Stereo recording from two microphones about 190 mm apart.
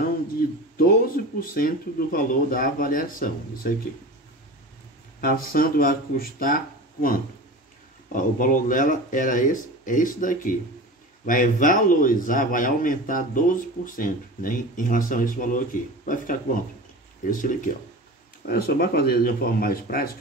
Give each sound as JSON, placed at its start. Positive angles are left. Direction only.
{"t": 0.7, "sound": "speech", "side_deg": 50}
{"t": 5.2, "sound": "speech", "side_deg": 50}
{"t": 18.8, "sound": "speech", "side_deg": 55}